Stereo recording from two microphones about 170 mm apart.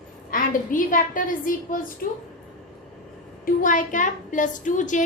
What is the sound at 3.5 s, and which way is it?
A woman's voice, 50° left (ahead or behind).